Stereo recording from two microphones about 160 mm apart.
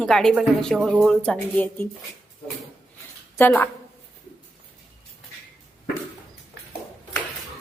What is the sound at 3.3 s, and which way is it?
Music, 15° left (ahead or behind).